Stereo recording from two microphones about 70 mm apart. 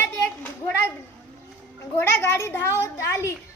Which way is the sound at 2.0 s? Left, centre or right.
Left.